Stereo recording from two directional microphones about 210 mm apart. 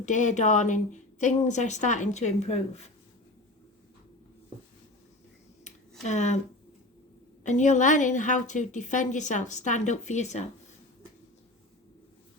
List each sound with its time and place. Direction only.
0.0 s a woman's voice: 35° left (ahead or behind)
5.6 s a sound: 35° left (ahead or behind)
7.4 s a woman's voice: 35° left (ahead or behind)